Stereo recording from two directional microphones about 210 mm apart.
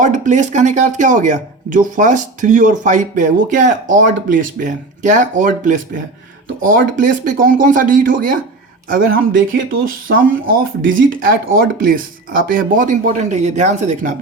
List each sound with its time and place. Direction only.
0.0 s speech: 35° right (ahead or behind)
10.1 s speech: 70° right (ahead or behind)
10.5 s speech: 40° right (ahead or behind)